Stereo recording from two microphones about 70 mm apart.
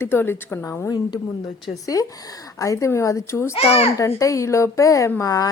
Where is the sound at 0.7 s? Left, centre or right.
Left.